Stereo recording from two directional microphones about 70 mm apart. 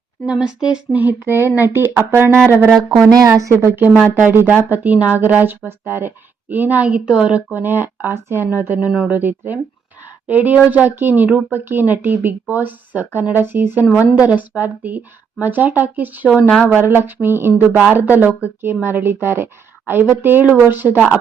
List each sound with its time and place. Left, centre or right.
0.3 s speech: centre
0.9 s speech: right
2.7 s speech: right
3.2 s speech: right
3.5 s speech: right; by 7.4 s centre
7.5 s speech: right
10.1 s a sound: right
10.7 s speech: right
16.3 s speech: centre
16.6 s speech: right